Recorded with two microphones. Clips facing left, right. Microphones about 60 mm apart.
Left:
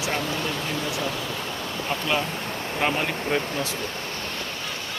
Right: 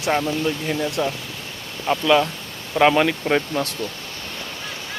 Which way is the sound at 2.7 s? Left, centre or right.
Right.